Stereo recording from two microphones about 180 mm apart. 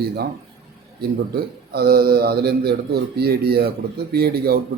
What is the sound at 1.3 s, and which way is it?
A man's voice, 60° right (ahead or behind).